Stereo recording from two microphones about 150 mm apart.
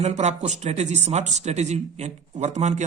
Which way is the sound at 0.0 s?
50° right (ahead or behind).